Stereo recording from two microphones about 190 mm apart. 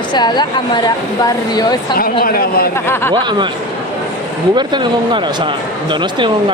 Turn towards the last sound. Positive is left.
turn(degrees=-25)  # may be behind; listen again after turning